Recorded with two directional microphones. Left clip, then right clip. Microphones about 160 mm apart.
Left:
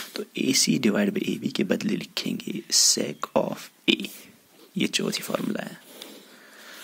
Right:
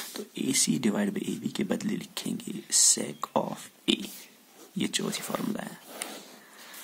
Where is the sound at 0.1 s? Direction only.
20° left (ahead or behind).